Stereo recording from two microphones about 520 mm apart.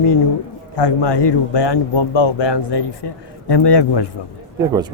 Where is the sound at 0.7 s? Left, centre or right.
Left.